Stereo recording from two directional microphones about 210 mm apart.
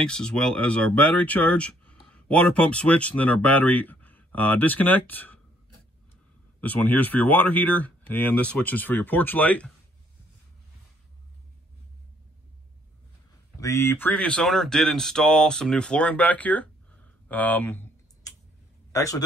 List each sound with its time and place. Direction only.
0.0 s speech: 5° left (ahead or behind)
6.6 s speech: 10° left (ahead or behind)
13.6 s speech: 15° left (ahead or behind)
17.3 s typing: 10° left (ahead or behind)
18.9 s a man's voice: 15° left (ahead or behind)